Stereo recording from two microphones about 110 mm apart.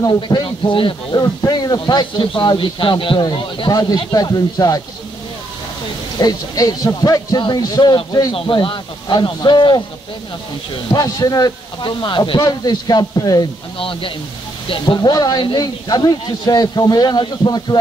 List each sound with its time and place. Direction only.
0.0 s speech: 40° left (ahead or behind)
1.1 s speech: 35° left (ahead or behind)
3.7 s speech: 35° left (ahead or behind)
6.1 s speech: 35° left (ahead or behind)
8.3 s speech: 50° left (ahead or behind)
10.9 s speech: 35° left (ahead or behind)
13.7 s speech: 55° left (ahead or behind)
14.7 s speech: 40° left (ahead or behind)